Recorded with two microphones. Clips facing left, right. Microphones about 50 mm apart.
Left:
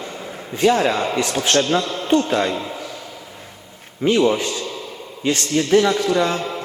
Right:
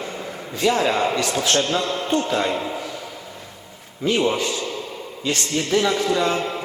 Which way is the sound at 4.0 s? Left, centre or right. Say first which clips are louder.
Left 4 dB; left.